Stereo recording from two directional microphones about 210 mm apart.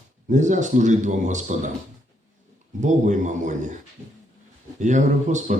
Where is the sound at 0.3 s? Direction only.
35° right (ahead or behind).